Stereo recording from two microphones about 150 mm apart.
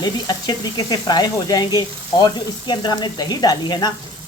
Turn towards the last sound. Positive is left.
turn(degrees=30)  # may be behind; listen again after turning